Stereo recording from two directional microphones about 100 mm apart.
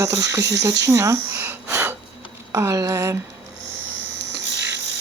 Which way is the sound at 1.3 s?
20° right (ahead or behind).